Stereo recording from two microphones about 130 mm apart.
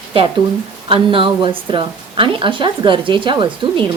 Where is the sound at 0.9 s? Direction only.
40° right (ahead or behind).